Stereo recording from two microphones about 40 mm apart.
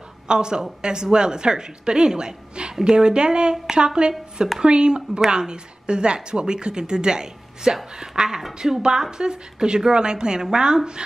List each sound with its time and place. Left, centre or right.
0.3 s speech: right